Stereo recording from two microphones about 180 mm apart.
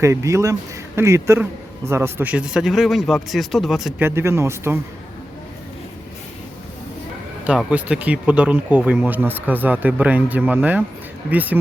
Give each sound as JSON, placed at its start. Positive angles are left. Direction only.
{"t": 0.0, "sound": "speech", "side_deg": -15}
{"t": 4.0, "sound": "speech", "side_deg": -15}
{"t": 7.4, "sound": "speech", "side_deg": -5}